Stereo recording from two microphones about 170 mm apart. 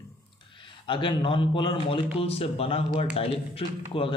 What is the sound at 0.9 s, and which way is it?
A man's voice, 30° left (ahead or behind).